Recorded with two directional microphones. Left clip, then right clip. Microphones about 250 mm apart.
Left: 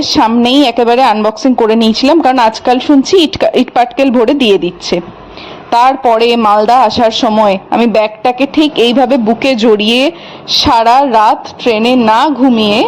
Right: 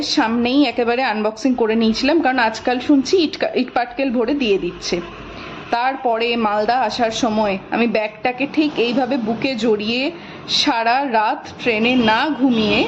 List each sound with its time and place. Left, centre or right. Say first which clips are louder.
0.0 s a woman's voice: left 9 dB; left